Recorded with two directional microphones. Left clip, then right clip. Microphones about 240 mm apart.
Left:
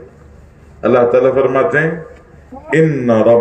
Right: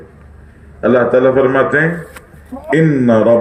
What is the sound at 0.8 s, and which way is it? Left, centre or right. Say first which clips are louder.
A man's voice: even; right.